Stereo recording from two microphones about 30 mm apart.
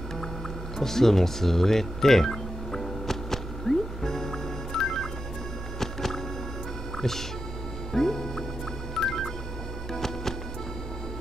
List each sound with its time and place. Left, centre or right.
0.7 s music: centre
7.0 s speech: centre
7.9 s music: centre